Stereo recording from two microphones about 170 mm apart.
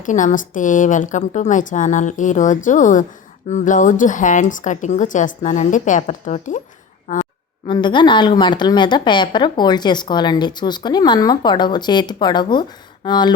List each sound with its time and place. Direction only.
0.0 s a woman's voice: 50° left (ahead or behind)
7.7 s speech: 25° left (ahead or behind)